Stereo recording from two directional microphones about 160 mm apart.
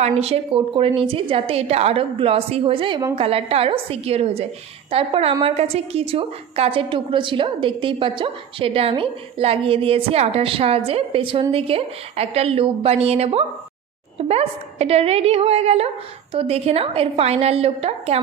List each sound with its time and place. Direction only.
0.0 s a woman's voice: 40° right (ahead or behind)